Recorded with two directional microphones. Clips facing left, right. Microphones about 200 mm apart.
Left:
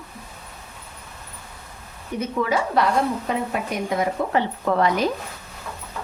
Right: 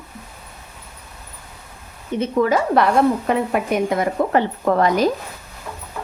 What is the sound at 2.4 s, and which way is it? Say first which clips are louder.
Speech: right 5 dB; 50° right (ahead or behind).